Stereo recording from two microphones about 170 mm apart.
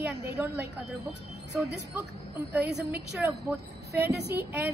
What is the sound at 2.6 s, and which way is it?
Speech, 80° right.